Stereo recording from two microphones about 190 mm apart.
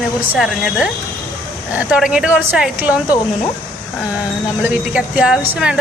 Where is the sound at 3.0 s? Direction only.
15° left (ahead or behind).